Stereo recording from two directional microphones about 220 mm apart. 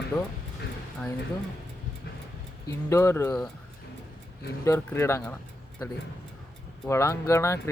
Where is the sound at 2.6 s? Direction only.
10° left (ahead or behind).